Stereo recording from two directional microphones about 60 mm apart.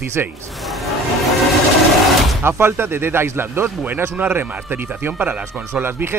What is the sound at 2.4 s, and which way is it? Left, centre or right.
Speech, right.